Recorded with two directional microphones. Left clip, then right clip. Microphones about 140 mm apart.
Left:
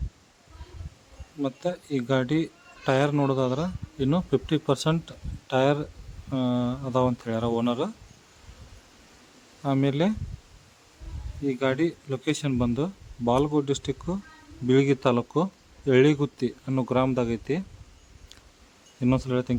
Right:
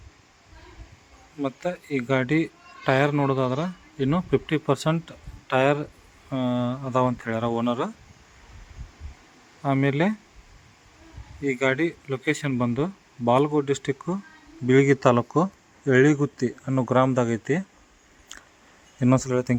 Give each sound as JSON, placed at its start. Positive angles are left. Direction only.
{"t": 1.4, "sound": "a man's voice", "side_deg": 0}
{"t": 9.6, "sound": "a man's voice", "side_deg": 5}
{"t": 11.4, "sound": "a man's voice", "side_deg": 0}
{"t": 15.0, "sound": "speech", "side_deg": -15}
{"t": 15.9, "sound": "a man's voice", "side_deg": 0}
{"t": 16.8, "sound": "speech", "side_deg": -10}
{"t": 19.1, "sound": "speech", "side_deg": -20}